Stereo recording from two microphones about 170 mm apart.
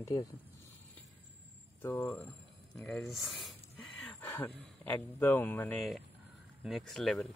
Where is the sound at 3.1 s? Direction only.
Centre (ahead or behind).